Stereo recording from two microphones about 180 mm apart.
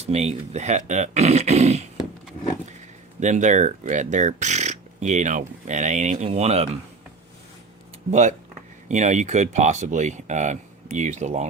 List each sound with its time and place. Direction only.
0.0 s speech: 35° right (ahead or behind)
3.2 s speech: 40° right (ahead or behind)
8.1 s speech: 40° right (ahead or behind)